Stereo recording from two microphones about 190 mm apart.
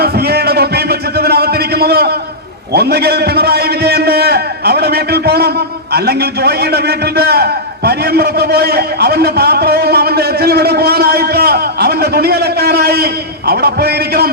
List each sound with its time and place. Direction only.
0.0 s music: 55° right (ahead or behind)
2.7 s a man's voice: 55° right (ahead or behind)